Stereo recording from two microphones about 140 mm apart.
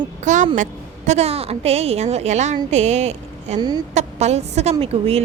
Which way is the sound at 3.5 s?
30° right (ahead or behind).